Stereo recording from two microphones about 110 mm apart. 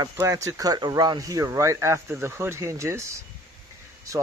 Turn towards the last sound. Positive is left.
turn(degrees=-25)  # may be behind; listen again after turning